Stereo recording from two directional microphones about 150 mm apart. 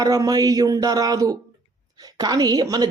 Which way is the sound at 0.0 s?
25° right (ahead or behind).